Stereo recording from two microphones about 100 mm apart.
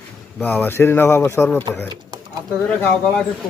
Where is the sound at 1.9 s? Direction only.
40° right (ahead or behind).